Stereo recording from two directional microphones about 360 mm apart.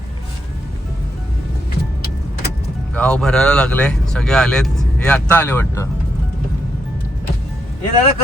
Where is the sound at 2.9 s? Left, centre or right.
Centre.